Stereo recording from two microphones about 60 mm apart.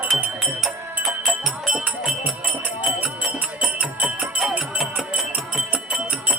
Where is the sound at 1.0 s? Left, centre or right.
Centre.